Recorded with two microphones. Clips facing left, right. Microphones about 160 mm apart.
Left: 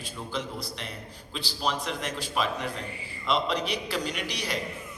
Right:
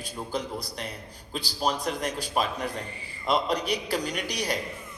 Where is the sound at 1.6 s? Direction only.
40° right (ahead or behind).